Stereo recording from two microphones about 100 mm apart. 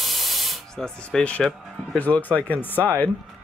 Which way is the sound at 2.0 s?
15° left (ahead or behind).